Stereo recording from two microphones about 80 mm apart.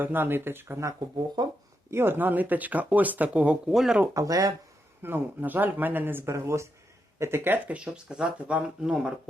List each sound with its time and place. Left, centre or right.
0.0 s speech: right
1.4 s speech: right
1.9 s speech: right
3.7 s speech: centre
4.1 s speech: right
5.0 s speech: right
7.8 s speech: centre